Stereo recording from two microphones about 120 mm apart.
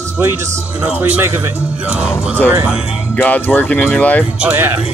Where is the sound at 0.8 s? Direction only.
15° right (ahead or behind).